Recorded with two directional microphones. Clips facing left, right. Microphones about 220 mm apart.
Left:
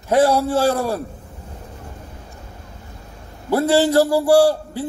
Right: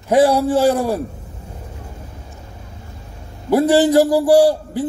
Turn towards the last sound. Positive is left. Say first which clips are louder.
# right 2 dB
turn(degrees=-15)  # may be behind; listen again after turning